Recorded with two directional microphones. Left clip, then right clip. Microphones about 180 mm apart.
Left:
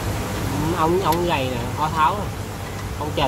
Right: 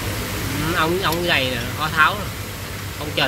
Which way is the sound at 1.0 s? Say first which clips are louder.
Right 1 dB; centre (ahead or behind).